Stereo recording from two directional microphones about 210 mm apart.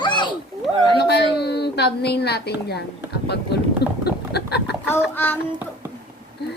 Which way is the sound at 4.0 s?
50° left (ahead or behind).